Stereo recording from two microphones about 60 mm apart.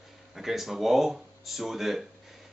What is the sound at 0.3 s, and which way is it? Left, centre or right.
A man's voice, centre.